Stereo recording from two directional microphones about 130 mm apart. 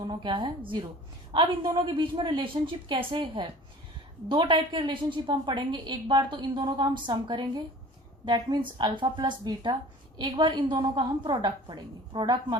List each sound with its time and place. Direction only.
0.0 s a woman's voice: 35° right (ahead or behind)